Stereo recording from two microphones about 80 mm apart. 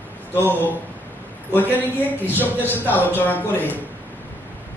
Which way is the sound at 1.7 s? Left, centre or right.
Left.